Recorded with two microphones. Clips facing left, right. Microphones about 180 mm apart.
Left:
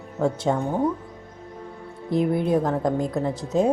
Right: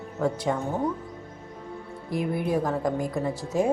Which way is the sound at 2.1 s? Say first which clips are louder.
Left 5 dB; 25° left (ahead or behind).